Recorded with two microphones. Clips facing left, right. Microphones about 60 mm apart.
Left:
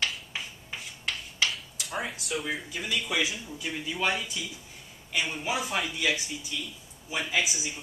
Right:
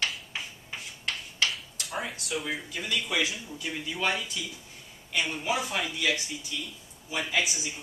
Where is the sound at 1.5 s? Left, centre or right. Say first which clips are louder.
Left 1 dB; centre.